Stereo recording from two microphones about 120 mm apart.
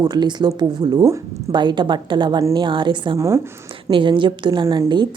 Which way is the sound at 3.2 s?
25° right (ahead or behind).